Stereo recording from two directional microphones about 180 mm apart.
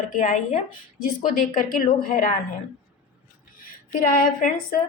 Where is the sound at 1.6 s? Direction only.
50° left (ahead or behind).